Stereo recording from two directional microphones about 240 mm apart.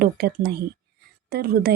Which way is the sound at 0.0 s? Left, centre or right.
Right.